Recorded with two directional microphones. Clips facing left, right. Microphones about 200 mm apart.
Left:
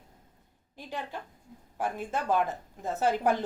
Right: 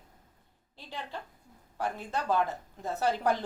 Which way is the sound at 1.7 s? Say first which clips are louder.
Left 2 dB; 15° left (ahead or behind).